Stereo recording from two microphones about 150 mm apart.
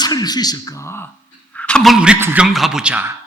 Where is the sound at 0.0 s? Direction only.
25° left (ahead or behind); by 3.1 s 10° right (ahead or behind).